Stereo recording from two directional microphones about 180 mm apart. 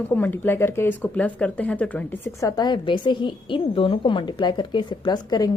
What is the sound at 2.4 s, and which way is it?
A woman's voice, 20° left (ahead or behind).